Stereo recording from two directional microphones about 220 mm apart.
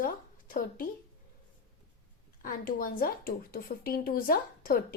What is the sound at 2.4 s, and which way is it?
A woman's voice, 40° left (ahead or behind).